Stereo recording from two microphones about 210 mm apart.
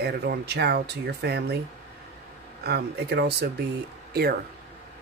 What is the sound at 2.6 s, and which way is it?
Speech, 50° right (ahead or behind).